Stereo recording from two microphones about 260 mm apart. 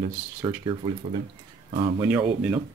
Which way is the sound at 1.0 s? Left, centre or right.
Right.